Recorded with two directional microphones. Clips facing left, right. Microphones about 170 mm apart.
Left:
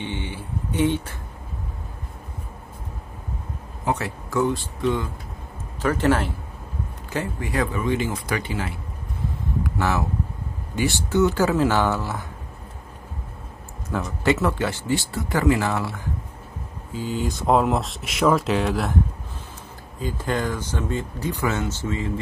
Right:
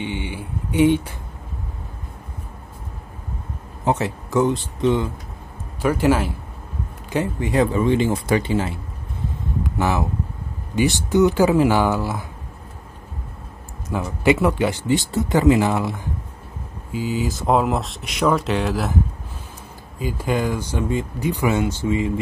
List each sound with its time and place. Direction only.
0.0 s speech: 15° right (ahead or behind)
3.8 s speech: 25° right (ahead or behind)
5.8 s speech: 10° right (ahead or behind)
7.1 s speech: 20° right (ahead or behind)
9.6 s a sound: 15° right (ahead or behind)
10.8 s speech: 15° right (ahead or behind)
14.0 s speech: 15° right (ahead or behind)
20.0 s speech: 10° right (ahead or behind)